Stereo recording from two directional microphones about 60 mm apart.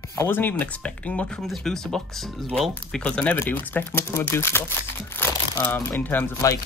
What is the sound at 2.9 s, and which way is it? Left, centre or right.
Speech, centre.